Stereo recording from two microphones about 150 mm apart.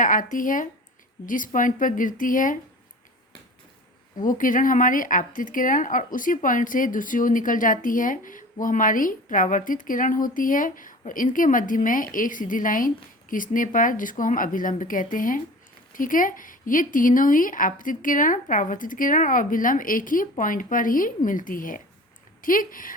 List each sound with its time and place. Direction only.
0.0 s speech: 60° left (ahead or behind)
4.2 s speech: 65° left (ahead or behind)